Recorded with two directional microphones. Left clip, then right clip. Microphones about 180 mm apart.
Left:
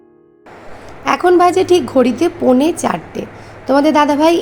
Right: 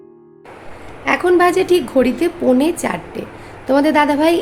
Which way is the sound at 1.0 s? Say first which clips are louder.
Left 3 dB; 20° left (ahead or behind).